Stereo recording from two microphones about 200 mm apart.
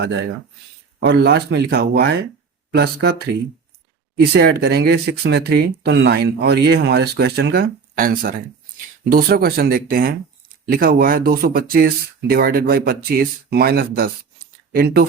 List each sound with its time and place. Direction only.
0.0 s speech: 60° right (ahead or behind)